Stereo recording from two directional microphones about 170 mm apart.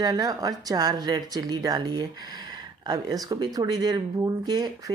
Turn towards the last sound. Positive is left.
turn(degrees=-25)  # may be behind; listen again after turning